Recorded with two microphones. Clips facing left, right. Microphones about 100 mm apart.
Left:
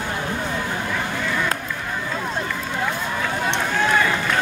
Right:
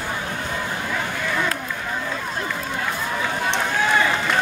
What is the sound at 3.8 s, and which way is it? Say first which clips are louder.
Run: even; centre (ahead or behind).